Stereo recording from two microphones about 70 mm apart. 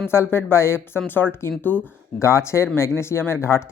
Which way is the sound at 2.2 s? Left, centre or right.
Left.